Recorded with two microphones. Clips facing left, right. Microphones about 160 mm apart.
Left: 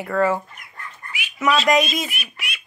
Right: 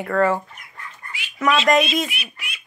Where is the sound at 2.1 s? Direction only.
45° left (ahead or behind).